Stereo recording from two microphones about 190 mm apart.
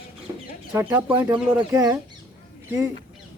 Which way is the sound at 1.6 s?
20° right (ahead or behind).